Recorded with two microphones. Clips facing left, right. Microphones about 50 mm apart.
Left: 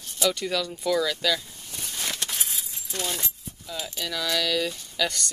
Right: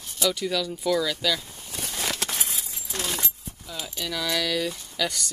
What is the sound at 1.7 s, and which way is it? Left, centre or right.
Keys jangling, right.